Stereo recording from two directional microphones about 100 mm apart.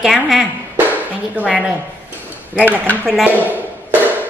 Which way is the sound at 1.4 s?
Centre (ahead or behind).